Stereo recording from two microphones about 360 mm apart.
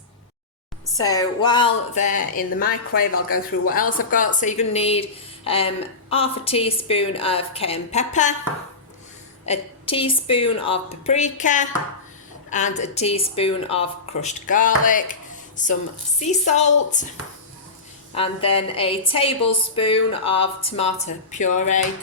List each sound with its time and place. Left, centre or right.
0.9 s a woman's voice: centre
9.5 s a woman's voice: centre
18.1 s a woman's voice: centre